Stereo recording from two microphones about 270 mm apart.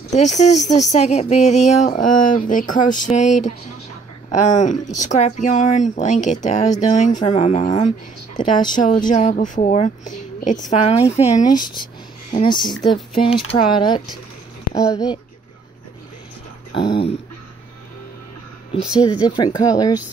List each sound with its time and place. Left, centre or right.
0.1 s speech: left
4.4 s speech: left
16.7 s speech: centre
18.7 s speech: centre